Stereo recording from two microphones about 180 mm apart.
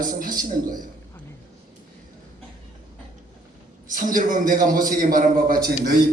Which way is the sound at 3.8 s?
50° right (ahead or behind).